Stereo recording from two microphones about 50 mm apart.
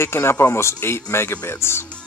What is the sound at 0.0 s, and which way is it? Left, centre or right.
Speech, left.